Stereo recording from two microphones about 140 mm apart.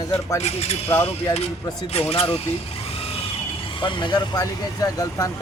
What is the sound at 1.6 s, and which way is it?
Speech, 25° left (ahead or behind).